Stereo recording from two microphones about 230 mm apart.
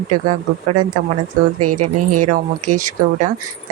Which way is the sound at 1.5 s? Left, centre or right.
Right.